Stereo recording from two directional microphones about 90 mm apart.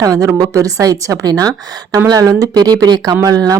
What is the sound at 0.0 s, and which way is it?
A woman's voice, 35° right (ahead or behind).